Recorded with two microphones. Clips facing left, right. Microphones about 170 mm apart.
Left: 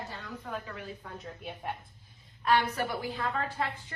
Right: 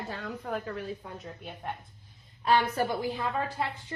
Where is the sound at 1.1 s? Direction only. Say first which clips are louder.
Even; centre (ahead or behind).